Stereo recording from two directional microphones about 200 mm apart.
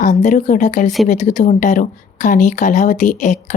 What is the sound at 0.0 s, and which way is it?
Speech, 35° left (ahead or behind).